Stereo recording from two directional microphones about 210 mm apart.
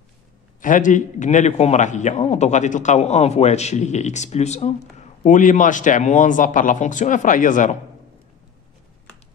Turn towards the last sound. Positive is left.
turn(degrees=40)  # may be behind; listen again after turning